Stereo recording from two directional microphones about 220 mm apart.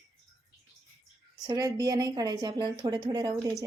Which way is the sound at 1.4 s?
15° right (ahead or behind).